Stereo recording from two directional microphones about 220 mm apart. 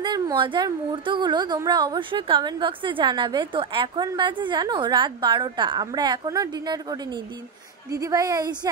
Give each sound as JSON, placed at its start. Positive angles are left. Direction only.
{"t": 0.0, "sound": "a woman's voice", "side_deg": -20}